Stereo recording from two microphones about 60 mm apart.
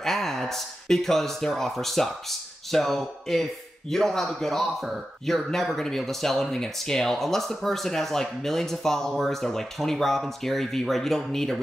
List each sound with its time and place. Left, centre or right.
0.0 s speech: centre